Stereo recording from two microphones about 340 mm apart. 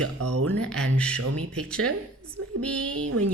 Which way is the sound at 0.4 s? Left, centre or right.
Centre.